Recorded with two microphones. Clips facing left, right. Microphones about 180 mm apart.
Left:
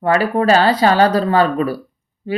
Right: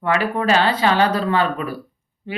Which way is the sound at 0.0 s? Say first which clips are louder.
Left 5 dB; 40° left (ahead or behind).